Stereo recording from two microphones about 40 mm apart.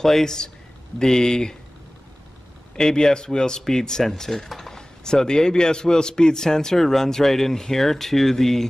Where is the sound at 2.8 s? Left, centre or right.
Centre.